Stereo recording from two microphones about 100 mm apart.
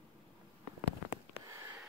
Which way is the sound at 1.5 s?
30° right (ahead or behind).